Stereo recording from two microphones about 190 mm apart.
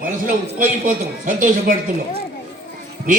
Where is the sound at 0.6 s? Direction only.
40° right (ahead or behind).